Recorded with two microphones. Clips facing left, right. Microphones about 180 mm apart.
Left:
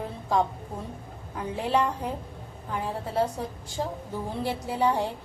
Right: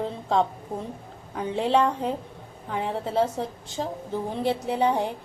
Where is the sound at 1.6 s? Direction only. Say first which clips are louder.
Right 4 dB; 25° right (ahead or behind).